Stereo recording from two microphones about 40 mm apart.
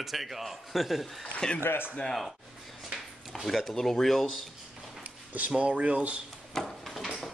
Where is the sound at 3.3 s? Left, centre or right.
Centre.